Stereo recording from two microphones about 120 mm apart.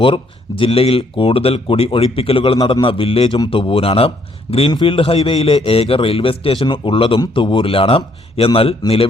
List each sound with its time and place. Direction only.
0.6 s a man's voice: 55° left (ahead or behind)
2.6 s a man's voice: 35° left (ahead or behind)
2.8 s a man's voice: 50° left (ahead or behind)